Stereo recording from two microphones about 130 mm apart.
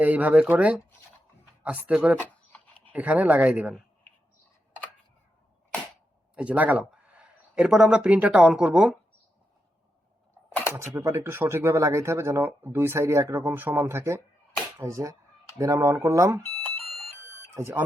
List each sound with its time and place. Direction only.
0.0 s speech: 10° right (ahead or behind)
2.5 s a sound: 10° left (ahead or behind)
2.9 s speech: 10° right (ahead or behind)
6.3 s speech: 10° right (ahead or behind)
10.8 s speech: 20° right (ahead or behind)
17.5 s speech: 20° right (ahead or behind)